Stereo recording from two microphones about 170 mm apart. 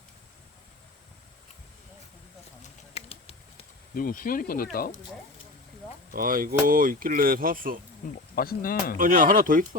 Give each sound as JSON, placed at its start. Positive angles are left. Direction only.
{"t": 2.9, "sound": "a sound", "side_deg": 35}
{"t": 3.9, "sound": "speech", "side_deg": 55}
{"t": 6.1, "sound": "speech", "side_deg": -55}
{"t": 8.0, "sound": "speech", "side_deg": 55}
{"t": 9.0, "sound": "speech", "side_deg": -55}